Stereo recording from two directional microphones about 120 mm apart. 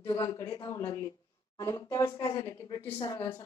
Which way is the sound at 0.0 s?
35° left (ahead or behind).